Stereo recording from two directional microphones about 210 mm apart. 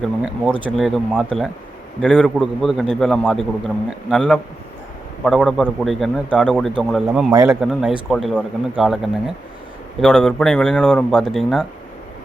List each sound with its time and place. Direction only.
0.6 s a man's voice: 5° right (ahead or behind)
7.3 s speech: 15° right (ahead or behind)
7.6 s a man's voice: 5° right (ahead or behind)